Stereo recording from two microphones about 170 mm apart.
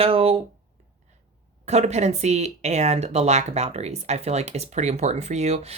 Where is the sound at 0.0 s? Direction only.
35° right (ahead or behind).